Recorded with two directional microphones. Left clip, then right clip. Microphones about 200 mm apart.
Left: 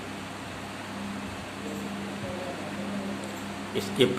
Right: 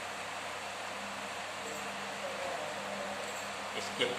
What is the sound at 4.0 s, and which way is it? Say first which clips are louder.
Speech: left 9 dB; 40° left (ahead or behind).